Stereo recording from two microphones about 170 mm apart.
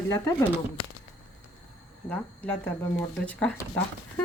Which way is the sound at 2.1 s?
10° left (ahead or behind).